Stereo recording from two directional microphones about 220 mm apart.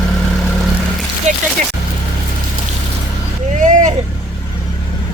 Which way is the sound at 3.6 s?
35° right (ahead or behind).